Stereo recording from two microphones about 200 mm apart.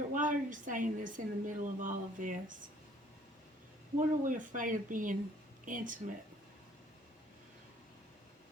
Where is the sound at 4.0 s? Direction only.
40° right (ahead or behind).